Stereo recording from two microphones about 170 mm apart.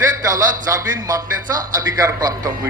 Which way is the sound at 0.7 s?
20° right (ahead or behind).